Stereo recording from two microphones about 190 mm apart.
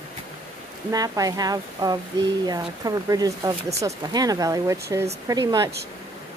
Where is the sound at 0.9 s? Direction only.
20° right (ahead or behind).